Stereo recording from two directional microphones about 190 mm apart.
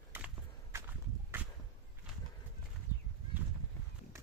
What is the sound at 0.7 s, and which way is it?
Walk, 10° right (ahead or behind).